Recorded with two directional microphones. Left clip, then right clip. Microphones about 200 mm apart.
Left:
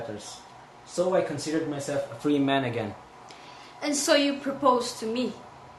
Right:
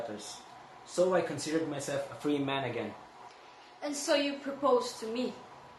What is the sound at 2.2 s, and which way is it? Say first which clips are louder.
Speech: left 8 dB; 10° left (ahead or behind).